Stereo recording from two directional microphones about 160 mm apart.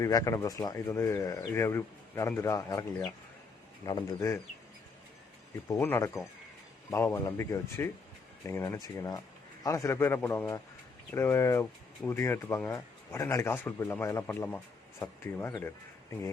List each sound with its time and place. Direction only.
0.0 s speech: 20° left (ahead or behind)
5.7 s speech: 15° left (ahead or behind)